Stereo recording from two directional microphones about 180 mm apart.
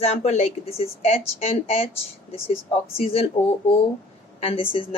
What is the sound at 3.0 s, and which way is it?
Speech, 30° left (ahead or behind).